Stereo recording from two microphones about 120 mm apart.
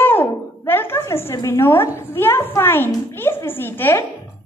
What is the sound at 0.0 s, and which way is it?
Music, 20° left (ahead or behind).